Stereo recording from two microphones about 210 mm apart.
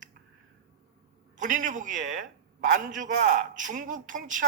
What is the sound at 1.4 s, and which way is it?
A man's voice, 40° right (ahead or behind).